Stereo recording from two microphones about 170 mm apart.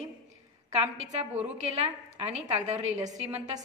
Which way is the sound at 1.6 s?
40° right (ahead or behind).